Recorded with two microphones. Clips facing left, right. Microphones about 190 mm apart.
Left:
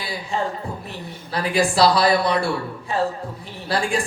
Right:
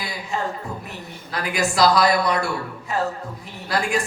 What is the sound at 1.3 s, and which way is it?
A man's voice, 30° left (ahead or behind).